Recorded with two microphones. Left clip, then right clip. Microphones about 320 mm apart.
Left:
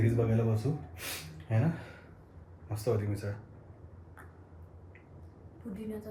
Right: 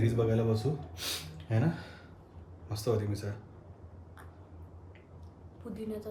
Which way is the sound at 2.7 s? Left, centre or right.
Centre.